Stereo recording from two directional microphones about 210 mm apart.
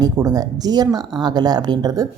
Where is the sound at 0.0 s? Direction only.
20° right (ahead or behind).